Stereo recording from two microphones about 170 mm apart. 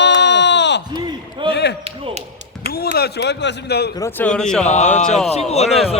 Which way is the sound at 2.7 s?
65° left (ahead or behind).